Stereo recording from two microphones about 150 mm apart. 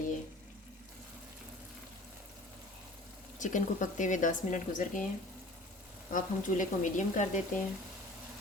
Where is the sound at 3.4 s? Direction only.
55° left (ahead or behind).